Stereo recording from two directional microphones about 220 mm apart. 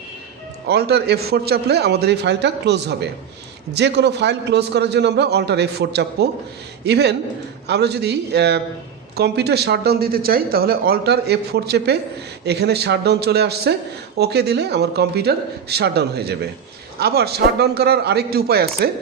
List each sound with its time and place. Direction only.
0.7 s speech: 45° right (ahead or behind)